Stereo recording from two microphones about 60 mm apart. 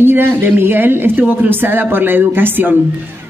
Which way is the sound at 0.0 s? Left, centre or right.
Right.